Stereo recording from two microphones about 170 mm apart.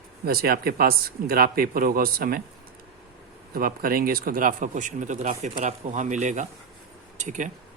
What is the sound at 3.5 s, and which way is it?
Speech, 55° right (ahead or behind).